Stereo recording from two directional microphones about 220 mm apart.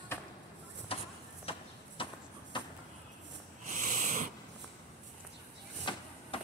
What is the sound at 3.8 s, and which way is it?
Wheeze, 35° right (ahead or behind).